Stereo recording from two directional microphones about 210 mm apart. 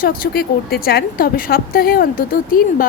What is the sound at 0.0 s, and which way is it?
A woman's voice, 45° left (ahead or behind).